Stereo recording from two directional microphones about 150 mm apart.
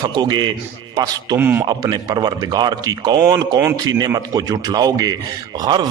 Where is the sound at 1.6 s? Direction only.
30° right (ahead or behind).